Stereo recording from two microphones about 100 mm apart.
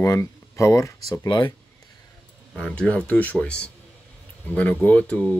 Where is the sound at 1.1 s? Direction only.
45° left (ahead or behind).